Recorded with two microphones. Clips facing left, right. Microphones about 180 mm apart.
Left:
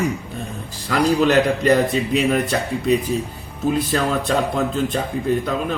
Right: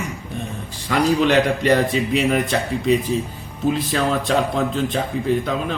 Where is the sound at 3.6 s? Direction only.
Centre (ahead or behind).